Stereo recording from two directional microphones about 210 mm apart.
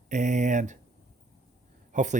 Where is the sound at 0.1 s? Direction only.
35° right (ahead or behind).